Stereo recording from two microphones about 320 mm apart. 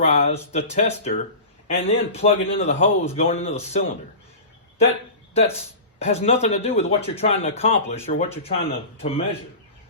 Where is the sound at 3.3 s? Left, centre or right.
Centre.